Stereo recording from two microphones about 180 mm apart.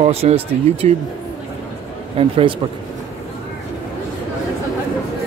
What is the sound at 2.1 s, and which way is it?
Speech, 30° right (ahead or behind).